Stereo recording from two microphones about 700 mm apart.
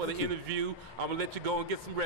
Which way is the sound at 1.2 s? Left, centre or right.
Right.